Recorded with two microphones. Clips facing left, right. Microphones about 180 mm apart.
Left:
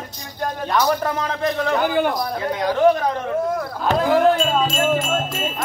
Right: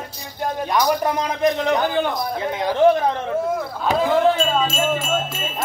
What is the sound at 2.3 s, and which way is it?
Speech, 25° right (ahead or behind).